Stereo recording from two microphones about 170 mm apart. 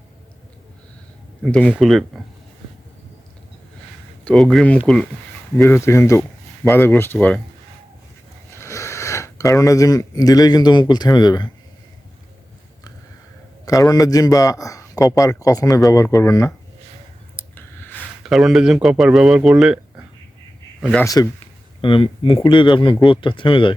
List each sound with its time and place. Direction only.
1.4 s speech: 5° left (ahead or behind)
4.2 s speech: 5° left (ahead or behind)
5.5 s speech: 15° left (ahead or behind)
8.4 s speech: 15° left (ahead or behind)
13.7 s a man's voice: 20° left (ahead or behind)
17.3 s a sound: 15° left (ahead or behind)
18.2 s speech: centre (ahead or behind)
21.0 s a man's voice: 20° left (ahead or behind)